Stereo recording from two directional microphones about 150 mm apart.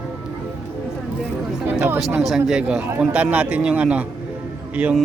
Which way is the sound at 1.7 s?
15° right (ahead or behind).